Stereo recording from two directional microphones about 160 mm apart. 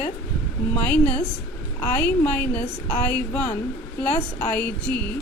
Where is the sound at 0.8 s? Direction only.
10° left (ahead or behind).